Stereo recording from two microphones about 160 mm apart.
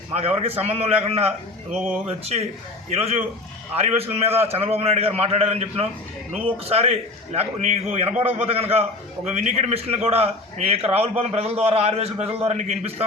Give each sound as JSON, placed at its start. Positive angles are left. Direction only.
{"t": 0.1, "sound": "a man's voice", "side_deg": -40}